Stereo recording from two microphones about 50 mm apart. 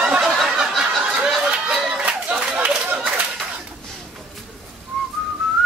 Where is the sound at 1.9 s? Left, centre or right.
Right.